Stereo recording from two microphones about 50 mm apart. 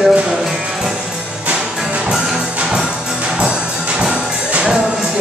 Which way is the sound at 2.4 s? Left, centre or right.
Right.